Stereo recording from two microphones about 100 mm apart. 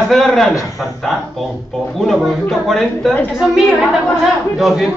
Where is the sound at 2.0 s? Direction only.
Centre (ahead or behind).